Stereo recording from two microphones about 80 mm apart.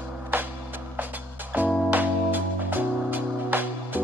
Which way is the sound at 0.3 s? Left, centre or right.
Right.